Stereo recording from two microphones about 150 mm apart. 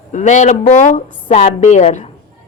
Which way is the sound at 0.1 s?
55° left (ahead or behind).